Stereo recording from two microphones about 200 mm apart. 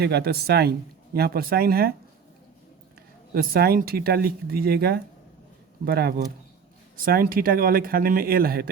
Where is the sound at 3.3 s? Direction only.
50° right (ahead or behind).